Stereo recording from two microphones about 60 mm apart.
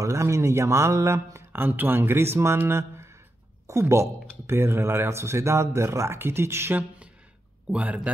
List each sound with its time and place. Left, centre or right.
0.0 s speech: right
1.6 s a man's voice: right
7.6 s a man's voice: right